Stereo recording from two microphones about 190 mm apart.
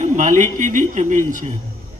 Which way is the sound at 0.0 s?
40° right (ahead or behind).